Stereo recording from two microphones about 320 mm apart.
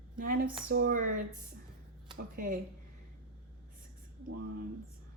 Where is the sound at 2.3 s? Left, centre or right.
Right.